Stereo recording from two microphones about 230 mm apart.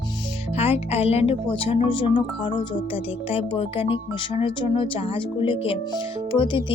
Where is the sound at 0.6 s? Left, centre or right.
Left.